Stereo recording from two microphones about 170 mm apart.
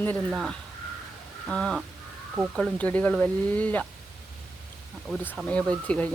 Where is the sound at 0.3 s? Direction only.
Centre (ahead or behind).